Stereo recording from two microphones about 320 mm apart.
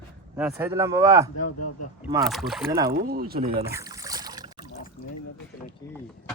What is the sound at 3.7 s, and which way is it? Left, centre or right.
Boat, centre.